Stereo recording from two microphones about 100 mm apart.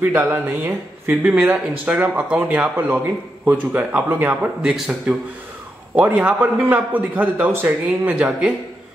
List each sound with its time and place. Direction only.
0.0 s a man's voice: 20° right (ahead or behind)
4.6 s a man's voice: 5° right (ahead or behind)